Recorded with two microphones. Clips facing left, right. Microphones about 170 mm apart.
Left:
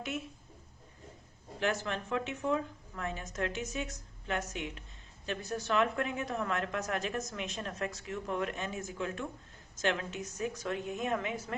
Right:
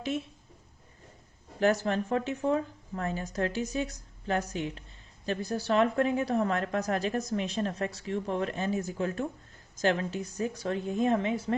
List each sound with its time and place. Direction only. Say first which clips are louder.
1.5 s a woman's voice: right 7 dB; 40° right (ahead or behind)